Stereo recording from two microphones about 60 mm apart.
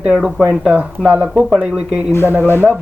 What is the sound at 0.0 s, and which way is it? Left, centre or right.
Speech, centre.